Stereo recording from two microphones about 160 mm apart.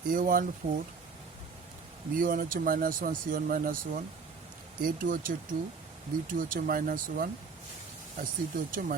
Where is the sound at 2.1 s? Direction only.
60° right (ahead or behind).